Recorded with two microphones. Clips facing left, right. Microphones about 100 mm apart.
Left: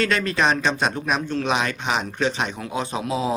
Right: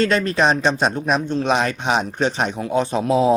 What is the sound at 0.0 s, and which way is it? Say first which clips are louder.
Speech: right 4 dB; 35° right (ahead or behind).